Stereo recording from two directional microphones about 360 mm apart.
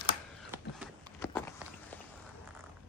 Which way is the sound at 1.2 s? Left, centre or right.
Centre.